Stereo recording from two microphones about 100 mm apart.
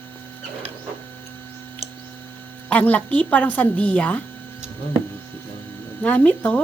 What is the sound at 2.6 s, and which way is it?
Speech, 15° left (ahead or behind).